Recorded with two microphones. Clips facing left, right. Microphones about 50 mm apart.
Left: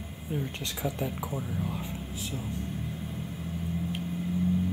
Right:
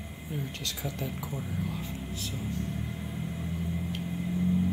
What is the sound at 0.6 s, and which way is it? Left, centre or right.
Speech, centre.